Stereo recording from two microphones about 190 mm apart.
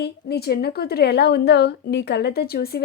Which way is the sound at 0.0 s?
55° left (ahead or behind).